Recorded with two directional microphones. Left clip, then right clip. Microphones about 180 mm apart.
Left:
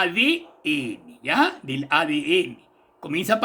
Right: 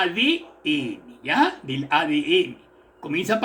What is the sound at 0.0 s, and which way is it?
Speech, 65° left (ahead or behind).